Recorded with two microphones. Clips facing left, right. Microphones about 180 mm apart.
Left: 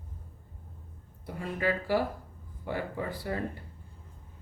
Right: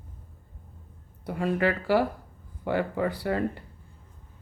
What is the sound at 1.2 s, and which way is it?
Speech, 75° right (ahead or behind).